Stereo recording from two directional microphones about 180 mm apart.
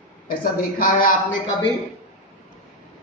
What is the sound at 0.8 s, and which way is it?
Speech, 50° left (ahead or behind).